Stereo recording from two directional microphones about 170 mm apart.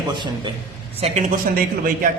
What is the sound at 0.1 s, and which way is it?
Speech, 25° right (ahead or behind).